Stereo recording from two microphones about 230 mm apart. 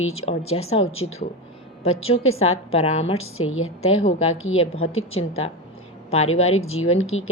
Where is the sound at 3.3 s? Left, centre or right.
Left.